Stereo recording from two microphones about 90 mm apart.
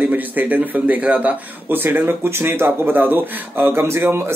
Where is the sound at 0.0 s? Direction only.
20° right (ahead or behind).